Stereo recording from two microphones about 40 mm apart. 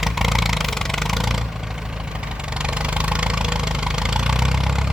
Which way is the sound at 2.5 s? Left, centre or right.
Right.